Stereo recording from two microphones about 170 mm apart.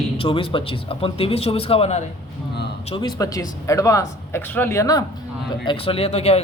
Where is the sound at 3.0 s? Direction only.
25° left (ahead or behind).